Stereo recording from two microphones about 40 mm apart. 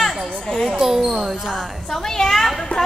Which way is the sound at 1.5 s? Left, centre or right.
Centre.